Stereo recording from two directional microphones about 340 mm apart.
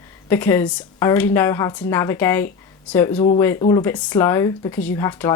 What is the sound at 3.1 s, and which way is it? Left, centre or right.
Speech, centre.